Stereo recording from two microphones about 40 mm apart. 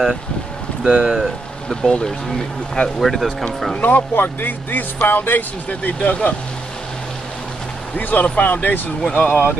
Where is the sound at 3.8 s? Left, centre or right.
Left.